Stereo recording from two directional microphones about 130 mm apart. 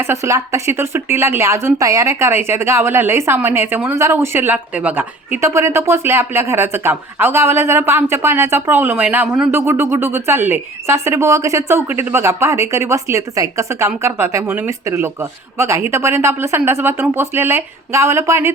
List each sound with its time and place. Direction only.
0.0 s a woman's voice: 20° right (ahead or behind)
9.6 s a woman's voice: 20° right (ahead or behind)